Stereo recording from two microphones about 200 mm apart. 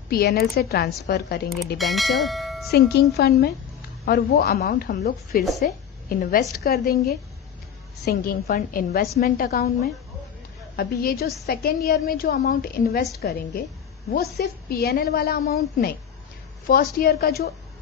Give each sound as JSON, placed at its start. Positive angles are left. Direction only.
{"t": 0.1, "sound": "a woman's voice", "side_deg": 50}
{"t": 1.8, "sound": "bell", "side_deg": 0}
{"t": 3.2, "sound": "a woman's voice", "side_deg": 50}